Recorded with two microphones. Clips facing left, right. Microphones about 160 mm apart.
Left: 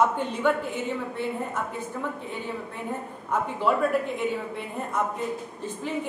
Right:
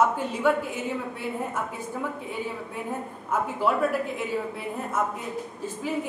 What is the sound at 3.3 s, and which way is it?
Speech, 5° right (ahead or behind).